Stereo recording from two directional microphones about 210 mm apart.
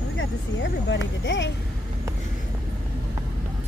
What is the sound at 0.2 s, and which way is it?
Speech, 60° left (ahead or behind).